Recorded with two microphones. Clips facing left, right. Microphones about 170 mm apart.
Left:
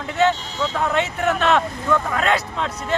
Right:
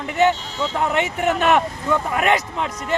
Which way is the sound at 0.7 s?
15° right (ahead or behind).